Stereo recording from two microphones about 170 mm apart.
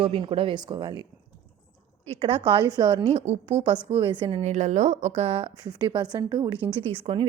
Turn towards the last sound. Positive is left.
turn(degrees=-30)  # may be behind; listen again after turning